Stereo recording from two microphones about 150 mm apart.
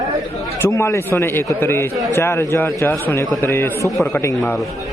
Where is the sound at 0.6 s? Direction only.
20° left (ahead or behind).